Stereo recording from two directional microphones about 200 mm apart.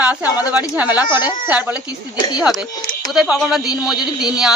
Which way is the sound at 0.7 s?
5° right (ahead or behind).